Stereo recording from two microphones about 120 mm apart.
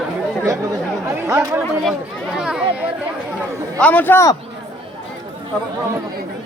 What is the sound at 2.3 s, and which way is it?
Speech, 5° right (ahead or behind).